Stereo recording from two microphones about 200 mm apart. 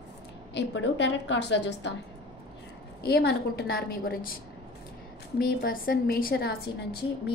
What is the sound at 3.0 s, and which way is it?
A woman's voice, 50° left (ahead or behind).